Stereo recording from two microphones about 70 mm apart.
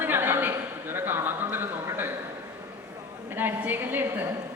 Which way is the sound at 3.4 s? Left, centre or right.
Right.